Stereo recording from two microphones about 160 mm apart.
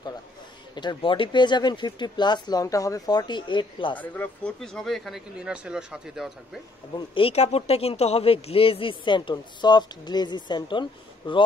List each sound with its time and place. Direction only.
0.7 s speech: 30° left (ahead or behind)
4.0 s speech: 10° left (ahead or behind)
7.0 s speech: 35° left (ahead or behind)